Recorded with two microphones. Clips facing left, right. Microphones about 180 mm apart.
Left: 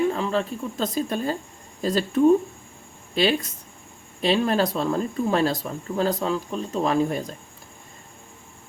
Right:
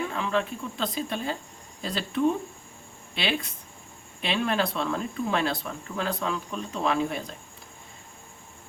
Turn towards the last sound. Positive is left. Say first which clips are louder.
# left 4 dB
turn(degrees=40)  # may be behind; listen again after turning